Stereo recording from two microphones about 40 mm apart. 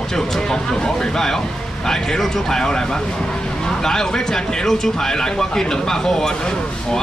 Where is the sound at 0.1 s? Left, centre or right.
Centre.